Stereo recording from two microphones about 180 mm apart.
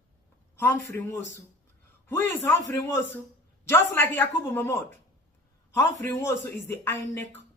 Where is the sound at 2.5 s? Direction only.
15° left (ahead or behind).